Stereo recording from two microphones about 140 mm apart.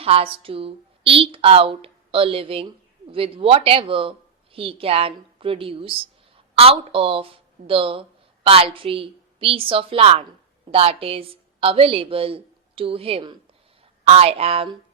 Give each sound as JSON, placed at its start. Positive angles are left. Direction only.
{"t": 0.0, "sound": "a woman's voice", "side_deg": -45}